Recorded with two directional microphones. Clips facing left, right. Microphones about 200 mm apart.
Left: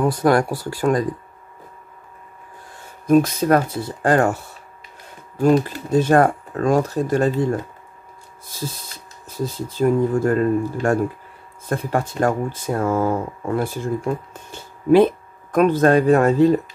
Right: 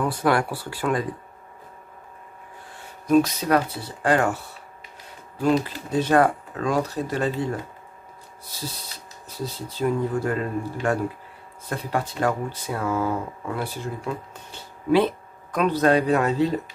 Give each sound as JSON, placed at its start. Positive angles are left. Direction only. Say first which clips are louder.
{"t": 0.0, "sound": "speech", "louder": "left 5 dB", "side_deg": 40}
{"t": 3.1, "sound": "speech", "louder": "left 4 dB", "side_deg": 50}
{"t": 5.4, "sound": "speech", "louder": "left 5 dB", "side_deg": 45}
{"t": 8.5, "sound": "speech", "louder": "left 5 dB", "side_deg": 50}